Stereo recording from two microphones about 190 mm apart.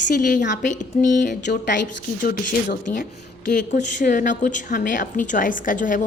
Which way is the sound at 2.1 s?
55° left (ahead or behind).